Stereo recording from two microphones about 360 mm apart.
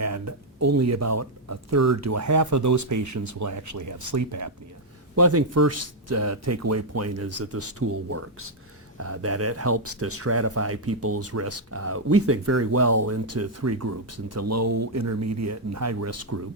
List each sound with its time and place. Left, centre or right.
0.0 s speech: right